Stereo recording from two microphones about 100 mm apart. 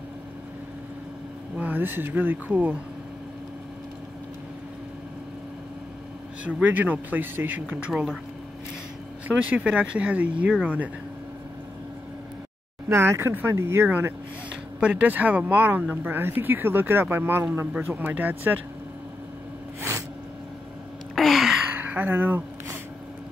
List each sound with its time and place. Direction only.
1.6 s speech: 20° right (ahead or behind)
6.4 s speech: 15° right (ahead or behind)
9.3 s speech: 15° right (ahead or behind)
12.8 s speech: 25° right (ahead or behind)
21.1 s a sound: centre (ahead or behind)
21.7 s a sound: 15° right (ahead or behind)